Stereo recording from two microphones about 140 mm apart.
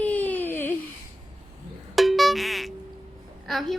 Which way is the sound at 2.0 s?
Centre (ahead or behind).